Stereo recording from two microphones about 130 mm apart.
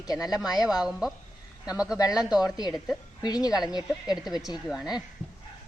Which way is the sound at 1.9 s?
30° left (ahead or behind).